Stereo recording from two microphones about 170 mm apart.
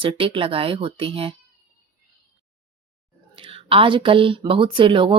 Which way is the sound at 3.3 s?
30° right (ahead or behind).